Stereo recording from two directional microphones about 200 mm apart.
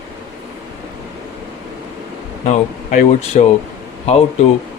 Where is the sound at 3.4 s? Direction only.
35° left (ahead or behind).